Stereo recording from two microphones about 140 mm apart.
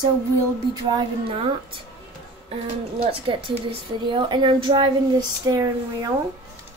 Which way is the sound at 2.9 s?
40° right (ahead or behind).